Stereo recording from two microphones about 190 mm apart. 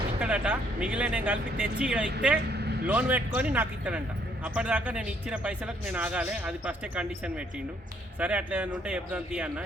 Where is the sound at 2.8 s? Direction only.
10° right (ahead or behind).